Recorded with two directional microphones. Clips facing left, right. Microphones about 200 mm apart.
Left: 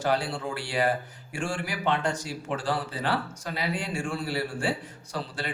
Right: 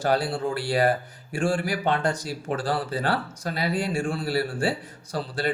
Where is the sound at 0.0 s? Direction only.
40° right (ahead or behind).